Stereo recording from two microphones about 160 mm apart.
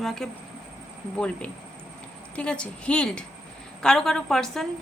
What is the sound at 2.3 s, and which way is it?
A woman's voice, 5° left (ahead or behind).